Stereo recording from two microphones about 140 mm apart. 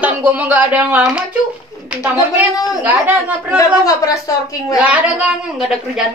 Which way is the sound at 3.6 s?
25° left (ahead or behind).